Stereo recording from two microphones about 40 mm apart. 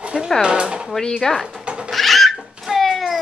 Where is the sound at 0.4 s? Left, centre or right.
Right.